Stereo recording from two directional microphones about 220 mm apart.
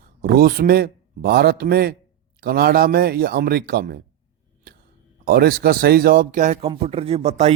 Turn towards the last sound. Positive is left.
turn(degrees=-30)  # may be behind; listen again after turning